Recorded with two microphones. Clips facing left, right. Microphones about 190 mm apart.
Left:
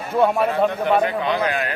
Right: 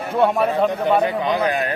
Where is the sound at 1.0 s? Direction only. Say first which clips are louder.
Right 1 dB; 20° right (ahead or behind).